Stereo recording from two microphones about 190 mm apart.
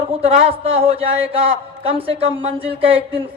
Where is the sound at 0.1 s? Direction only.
30° right (ahead or behind).